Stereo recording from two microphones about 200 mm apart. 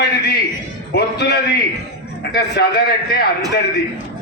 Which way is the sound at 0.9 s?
55° left (ahead or behind).